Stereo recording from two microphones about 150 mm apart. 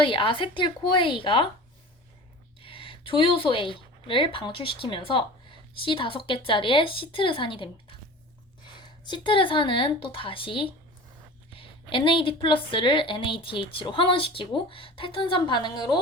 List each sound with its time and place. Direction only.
0.0 s a woman's voice: 35° left (ahead or behind)
2.6 s a woman's voice: 35° left (ahead or behind)